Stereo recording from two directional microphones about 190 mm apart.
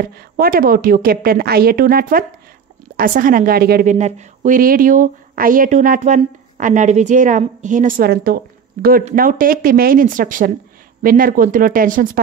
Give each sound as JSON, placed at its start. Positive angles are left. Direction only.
{"t": 0.0, "sound": "a woman's voice", "side_deg": -50}